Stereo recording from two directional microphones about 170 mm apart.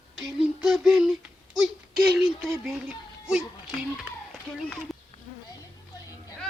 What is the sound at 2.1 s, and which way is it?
Speech, centre (ahead or behind).